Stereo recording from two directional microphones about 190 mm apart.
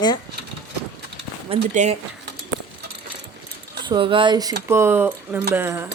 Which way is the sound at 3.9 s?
25° right (ahead or behind).